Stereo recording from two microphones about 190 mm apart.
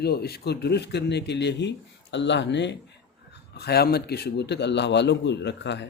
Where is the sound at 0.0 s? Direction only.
55° left (ahead or behind).